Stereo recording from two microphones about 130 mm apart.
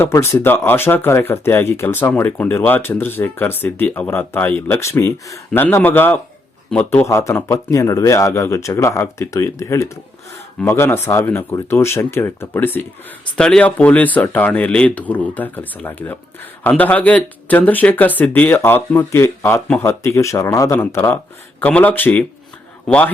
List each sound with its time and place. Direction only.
0.0 s speech: 20° left (ahead or behind)